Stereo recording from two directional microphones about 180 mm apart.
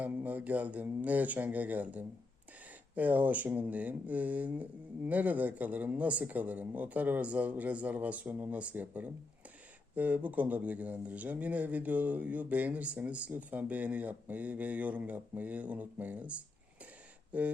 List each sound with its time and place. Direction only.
0.0 s speech: 10° right (ahead or behind)